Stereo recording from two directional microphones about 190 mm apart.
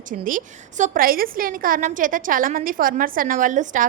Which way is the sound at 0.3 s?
45° right (ahead or behind).